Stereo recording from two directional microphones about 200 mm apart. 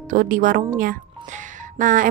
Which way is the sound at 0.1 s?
40° right (ahead or behind).